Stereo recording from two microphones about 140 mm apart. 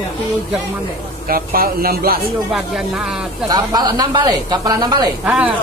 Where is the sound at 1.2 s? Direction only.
90° right.